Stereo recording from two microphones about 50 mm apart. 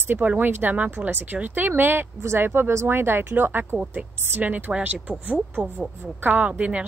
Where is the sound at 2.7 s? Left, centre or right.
Right.